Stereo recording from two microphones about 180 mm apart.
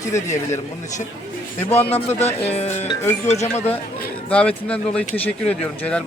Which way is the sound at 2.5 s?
35° left (ahead or behind).